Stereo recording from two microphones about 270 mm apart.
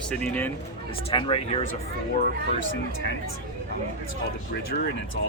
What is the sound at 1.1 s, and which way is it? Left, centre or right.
Speech, centre.